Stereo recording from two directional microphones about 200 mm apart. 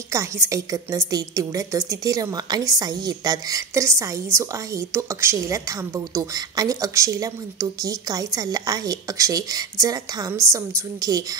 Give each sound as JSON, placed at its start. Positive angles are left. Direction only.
{"t": 0.1, "sound": "a woman's voice", "side_deg": -15}